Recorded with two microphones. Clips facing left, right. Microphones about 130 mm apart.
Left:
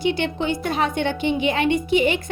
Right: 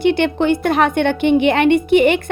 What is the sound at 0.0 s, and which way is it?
A woman's voice, 60° right (ahead or behind).